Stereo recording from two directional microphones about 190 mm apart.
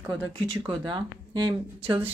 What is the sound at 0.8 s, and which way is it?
A woman's voice, 25° right (ahead or behind).